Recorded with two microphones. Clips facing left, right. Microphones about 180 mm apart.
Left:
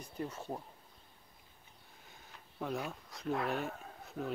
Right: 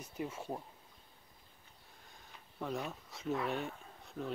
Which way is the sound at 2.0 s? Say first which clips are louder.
Left 1 dB; centre (ahead or behind).